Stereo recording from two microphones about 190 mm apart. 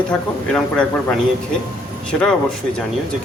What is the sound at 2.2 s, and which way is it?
Speech, 5° left (ahead or behind).